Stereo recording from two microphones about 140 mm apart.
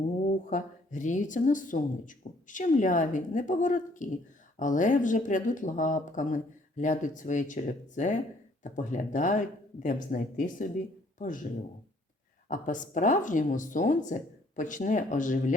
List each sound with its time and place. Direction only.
0.3 s speech: 65° left (ahead or behind)
12.5 s speech: 65° left (ahead or behind)